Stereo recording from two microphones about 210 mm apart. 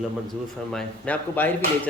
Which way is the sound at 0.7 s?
10° left (ahead or behind).